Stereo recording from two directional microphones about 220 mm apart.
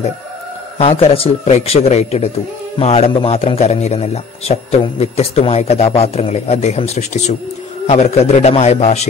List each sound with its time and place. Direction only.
0.7 s a man's voice: 25° left (ahead or behind)